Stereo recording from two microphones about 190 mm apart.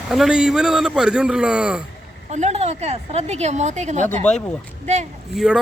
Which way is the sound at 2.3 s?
35° right (ahead or behind).